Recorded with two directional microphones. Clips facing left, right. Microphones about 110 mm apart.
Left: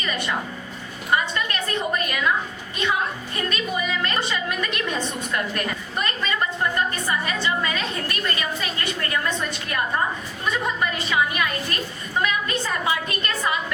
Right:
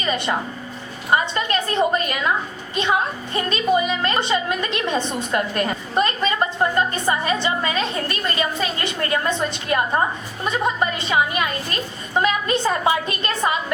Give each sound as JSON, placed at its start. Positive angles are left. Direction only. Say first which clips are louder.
{"t": 0.0, "sound": "a woman's voice", "louder": "right 4 dB", "side_deg": -30}
{"t": 3.3, "sound": "a woman's voice", "louder": "right 9 dB", "side_deg": -25}